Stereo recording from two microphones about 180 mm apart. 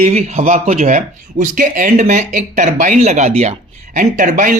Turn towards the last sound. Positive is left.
turn(degrees=-50)  # may be behind; listen again after turning